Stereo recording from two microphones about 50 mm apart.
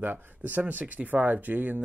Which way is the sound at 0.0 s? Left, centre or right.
Right.